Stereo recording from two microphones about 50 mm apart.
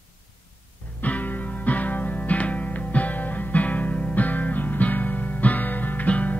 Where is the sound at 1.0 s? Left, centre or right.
Left.